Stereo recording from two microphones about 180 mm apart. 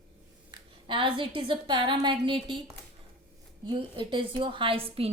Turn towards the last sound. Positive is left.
turn(degrees=-30)  # may be behind; listen again after turning